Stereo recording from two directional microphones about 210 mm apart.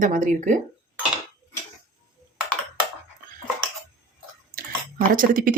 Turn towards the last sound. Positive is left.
turn(degrees=-40)  # may be behind; listen again after turning